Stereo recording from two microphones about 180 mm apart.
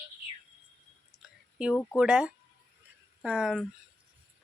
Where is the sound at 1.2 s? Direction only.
5° right (ahead or behind).